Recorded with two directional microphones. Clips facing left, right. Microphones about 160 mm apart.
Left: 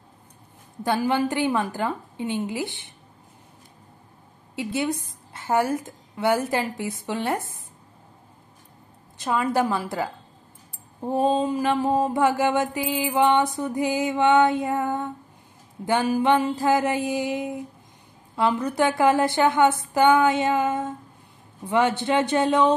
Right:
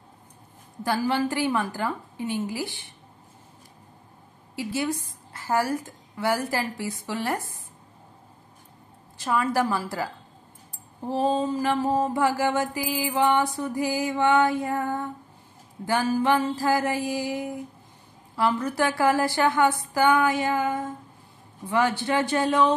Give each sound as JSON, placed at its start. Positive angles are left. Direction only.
{"t": 0.8, "sound": "mantra", "side_deg": 20}
{"t": 4.6, "sound": "mantra", "side_deg": 20}
{"t": 9.2, "sound": "mantra", "side_deg": 20}